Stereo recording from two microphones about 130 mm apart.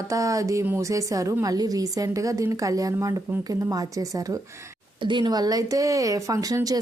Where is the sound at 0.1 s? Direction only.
25° right (ahead or behind).